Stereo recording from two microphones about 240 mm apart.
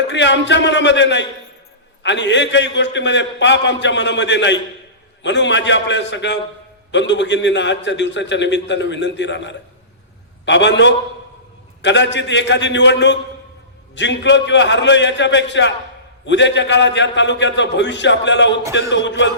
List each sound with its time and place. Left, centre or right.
0.1 s a man's voice: left